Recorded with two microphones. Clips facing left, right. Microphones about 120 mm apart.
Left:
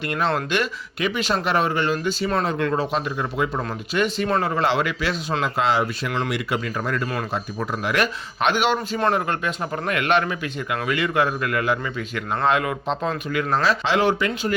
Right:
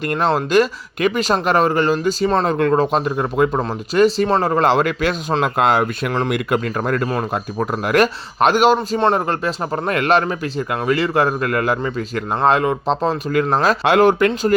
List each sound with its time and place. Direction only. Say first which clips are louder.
0.1 s speech: right 6 dB; 40° right (ahead or behind)
3.6 s speech: right 8 dB; 35° right (ahead or behind)
9.0 s speech: right 4 dB; 25° right (ahead or behind)
9.2 s speech: right 4 dB; 35° right (ahead or behind)